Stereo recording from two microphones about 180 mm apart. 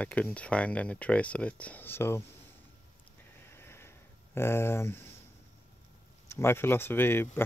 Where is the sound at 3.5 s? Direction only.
15° left (ahead or behind).